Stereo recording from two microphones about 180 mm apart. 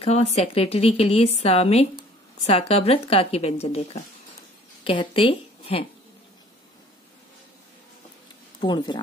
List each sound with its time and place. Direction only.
0.0 s a woman's voice: 35° left (ahead or behind)
8.5 s speech: 25° left (ahead or behind)